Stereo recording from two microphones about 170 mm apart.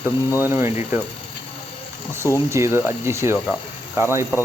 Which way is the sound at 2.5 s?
15° right (ahead or behind).